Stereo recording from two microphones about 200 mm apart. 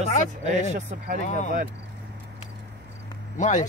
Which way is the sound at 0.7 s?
40° right (ahead or behind).